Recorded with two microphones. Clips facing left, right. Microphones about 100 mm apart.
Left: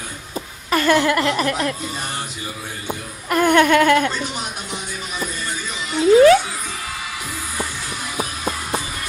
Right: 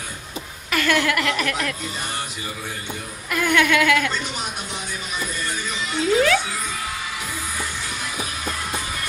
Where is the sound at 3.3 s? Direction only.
40° left (ahead or behind).